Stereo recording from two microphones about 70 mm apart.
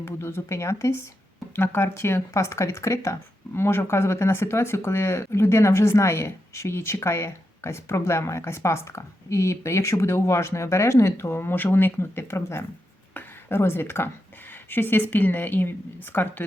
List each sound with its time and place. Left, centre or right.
0.0 s a woman's voice: left